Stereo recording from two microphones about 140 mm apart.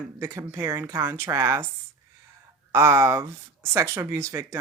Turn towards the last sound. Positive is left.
turn(degrees=-20)  # may be behind; listen again after turning